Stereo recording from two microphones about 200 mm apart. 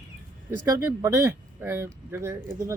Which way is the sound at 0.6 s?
15° right (ahead or behind).